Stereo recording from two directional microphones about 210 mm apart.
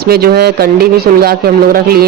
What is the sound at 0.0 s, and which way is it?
Speech, 45° right (ahead or behind).